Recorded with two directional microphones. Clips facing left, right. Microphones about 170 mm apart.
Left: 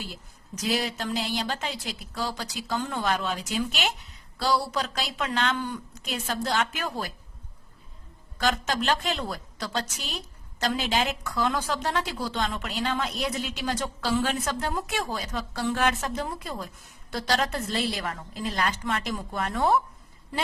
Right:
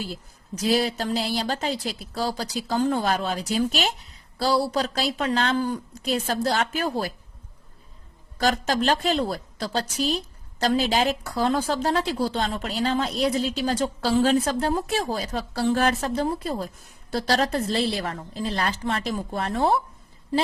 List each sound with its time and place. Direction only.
0.5 s a woman's voice: 35° right (ahead or behind)
8.4 s a woman's voice: 35° right (ahead or behind)